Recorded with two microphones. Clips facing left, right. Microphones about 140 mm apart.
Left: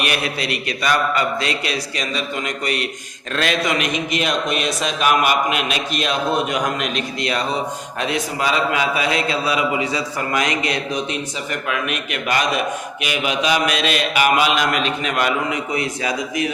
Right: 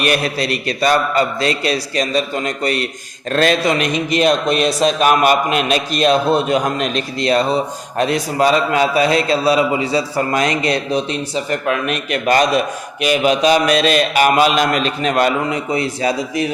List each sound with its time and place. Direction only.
0.0 s a man's voice: 40° right (ahead or behind)